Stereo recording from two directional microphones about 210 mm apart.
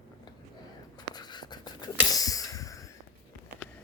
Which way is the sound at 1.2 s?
20° left (ahead or behind).